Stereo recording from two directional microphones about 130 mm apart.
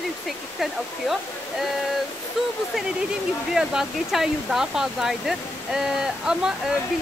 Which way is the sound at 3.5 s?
5° right (ahead or behind).